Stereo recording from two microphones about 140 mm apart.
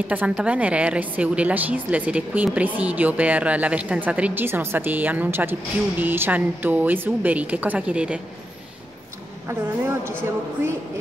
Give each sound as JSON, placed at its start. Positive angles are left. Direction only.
{"t": 0.1, "sound": "a woman's voice", "side_deg": -10}
{"t": 9.5, "sound": "a woman's voice", "side_deg": -15}